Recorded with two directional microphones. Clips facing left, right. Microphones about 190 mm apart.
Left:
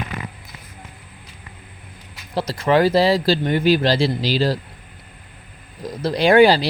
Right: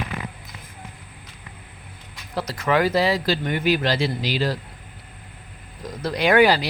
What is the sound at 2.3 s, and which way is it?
Speech, 30° left (ahead or behind).